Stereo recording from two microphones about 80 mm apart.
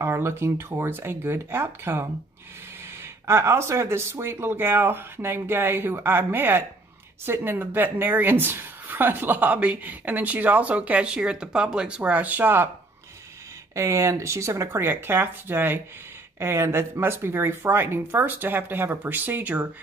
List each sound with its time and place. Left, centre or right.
0.0 s speech: right
3.3 s a woman's voice: right
13.7 s a woman's voice: right